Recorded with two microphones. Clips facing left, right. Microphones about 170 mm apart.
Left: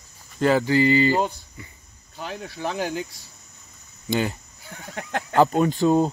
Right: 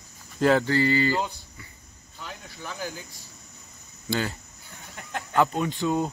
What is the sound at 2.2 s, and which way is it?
Speech, 70° left (ahead or behind).